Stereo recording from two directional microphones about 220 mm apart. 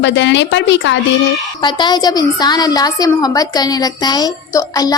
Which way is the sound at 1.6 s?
20° left (ahead or behind).